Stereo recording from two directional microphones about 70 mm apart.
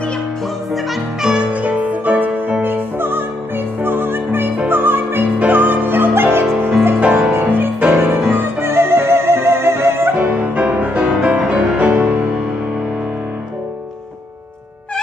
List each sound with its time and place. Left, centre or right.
1.2 s music: centre; by 10.1 s right
10.1 s music: centre